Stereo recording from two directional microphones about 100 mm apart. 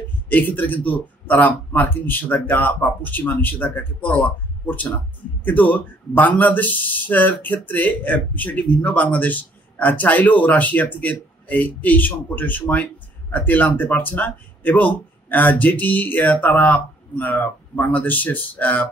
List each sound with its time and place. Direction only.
0.3 s a man's voice: 15° left (ahead or behind)